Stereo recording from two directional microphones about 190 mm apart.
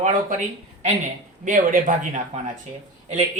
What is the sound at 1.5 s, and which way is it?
Speech, 45° right (ahead or behind).